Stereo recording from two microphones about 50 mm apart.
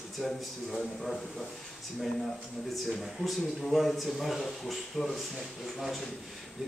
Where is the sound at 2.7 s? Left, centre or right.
Centre.